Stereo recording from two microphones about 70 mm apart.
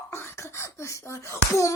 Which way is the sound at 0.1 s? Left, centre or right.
Left.